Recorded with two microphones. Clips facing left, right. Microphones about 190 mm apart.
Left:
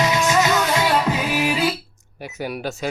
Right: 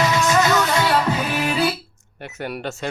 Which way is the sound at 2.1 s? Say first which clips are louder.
Left 1 dB; 5° left (ahead or behind).